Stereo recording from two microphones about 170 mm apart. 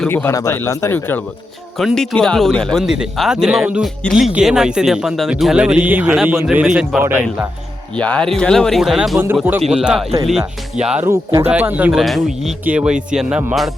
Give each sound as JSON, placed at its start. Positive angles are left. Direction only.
{"t": 0.0, "sound": "speech", "side_deg": 10}
{"t": 7.9, "sound": "speech", "side_deg": 5}
{"t": 11.0, "sound": "speech", "side_deg": -15}